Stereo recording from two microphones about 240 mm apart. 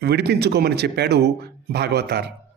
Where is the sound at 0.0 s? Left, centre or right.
Right.